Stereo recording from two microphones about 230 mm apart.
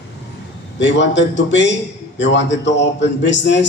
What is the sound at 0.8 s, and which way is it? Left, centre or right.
A man's voice, left.